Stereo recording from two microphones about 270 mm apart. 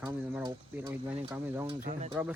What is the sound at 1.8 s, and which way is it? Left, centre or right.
Speech, right.